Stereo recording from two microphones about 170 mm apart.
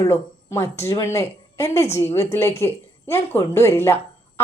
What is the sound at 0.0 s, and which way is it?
A woman's voice, 15° left (ahead or behind).